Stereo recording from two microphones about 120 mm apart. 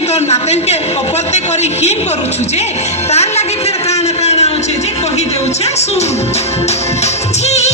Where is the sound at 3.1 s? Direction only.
65° left (ahead or behind).